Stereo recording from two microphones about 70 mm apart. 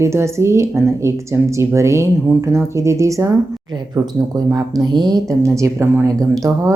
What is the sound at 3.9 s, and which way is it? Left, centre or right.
Speech, right.